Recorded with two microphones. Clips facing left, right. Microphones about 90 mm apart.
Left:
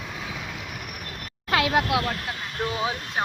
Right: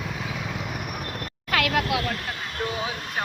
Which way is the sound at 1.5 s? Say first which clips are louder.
Left 2 dB; 20° left (ahead or behind).